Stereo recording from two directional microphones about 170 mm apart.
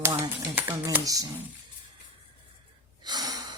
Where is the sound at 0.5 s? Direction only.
15° right (ahead or behind).